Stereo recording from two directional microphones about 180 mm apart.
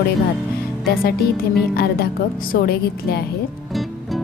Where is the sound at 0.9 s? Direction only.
60° left (ahead or behind).